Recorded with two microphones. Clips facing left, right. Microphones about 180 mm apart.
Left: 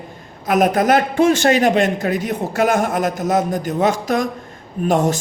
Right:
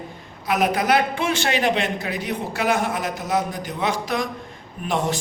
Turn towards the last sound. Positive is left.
turn(degrees=45)  # may be behind; listen again after turning